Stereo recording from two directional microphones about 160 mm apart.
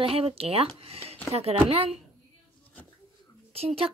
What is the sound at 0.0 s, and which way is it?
Speech, 35° right (ahead or behind).